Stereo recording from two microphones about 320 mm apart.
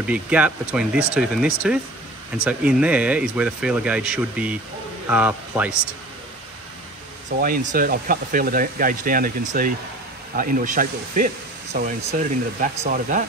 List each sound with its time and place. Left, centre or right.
0.0 s speech: centre
7.3 s speech: right